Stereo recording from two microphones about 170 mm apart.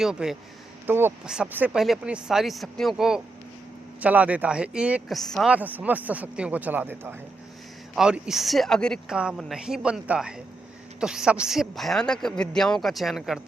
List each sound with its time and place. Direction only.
0.0 s speech: 5° right (ahead or behind)